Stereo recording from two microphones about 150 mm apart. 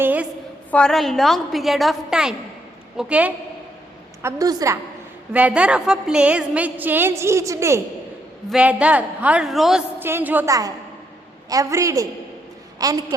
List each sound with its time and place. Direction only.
0.0 s a sound: 10° right (ahead or behind)
0.7 s a woman's voice: 5° left (ahead or behind)
4.2 s a woman's voice: 20° right (ahead or behind)
5.3 s a woman's voice: 10° right (ahead or behind)
8.4 s a woman's voice: 5° right (ahead or behind)
10.0 s a woman's voice: 15° right (ahead or behind)